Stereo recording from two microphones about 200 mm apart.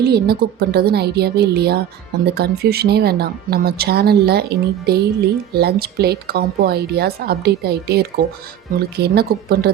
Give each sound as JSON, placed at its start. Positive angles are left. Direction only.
{"t": 0.0, "sound": "speech", "side_deg": -50}